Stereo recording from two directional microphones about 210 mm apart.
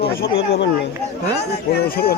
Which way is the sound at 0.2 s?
50° left (ahead or behind).